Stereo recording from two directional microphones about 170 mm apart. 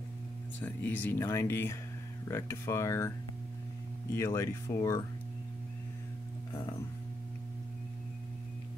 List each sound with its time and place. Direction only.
0.6 s speech: 10° left (ahead or behind)
4.1 s speech: 20° left (ahead or behind)